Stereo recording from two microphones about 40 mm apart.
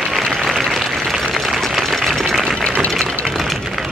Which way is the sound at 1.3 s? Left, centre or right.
Centre.